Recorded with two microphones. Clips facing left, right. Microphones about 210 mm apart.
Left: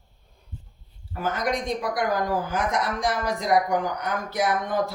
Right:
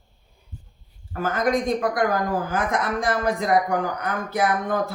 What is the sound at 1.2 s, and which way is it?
Speech, 50° right (ahead or behind).